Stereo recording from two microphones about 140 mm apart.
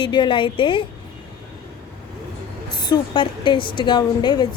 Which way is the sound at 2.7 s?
30° left (ahead or behind).